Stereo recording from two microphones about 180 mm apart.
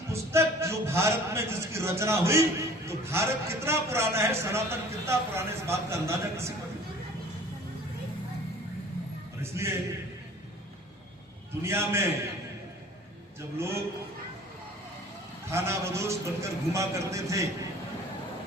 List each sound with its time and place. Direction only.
0.1 s a man's voice: 15° right (ahead or behind)
9.4 s a man's voice: 15° right (ahead or behind)
11.6 s a man's voice: 15° right (ahead or behind)
15.4 s a man's voice: 15° right (ahead or behind)